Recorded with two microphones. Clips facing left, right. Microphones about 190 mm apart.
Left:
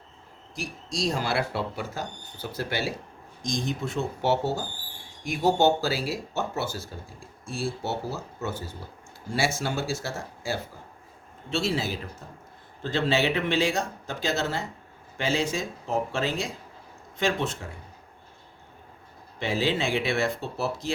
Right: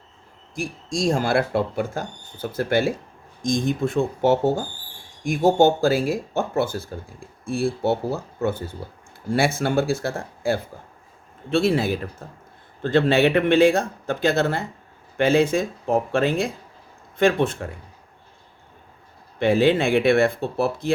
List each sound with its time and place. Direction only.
0.5 s speech: 50° right (ahead or behind)
19.4 s speech: 55° right (ahead or behind)